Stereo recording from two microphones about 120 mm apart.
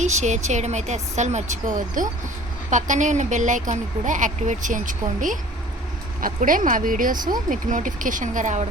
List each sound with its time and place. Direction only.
0.0 s speech: 75° right (ahead or behind); by 5.4 s 90° right
6.6 s speech: 90° right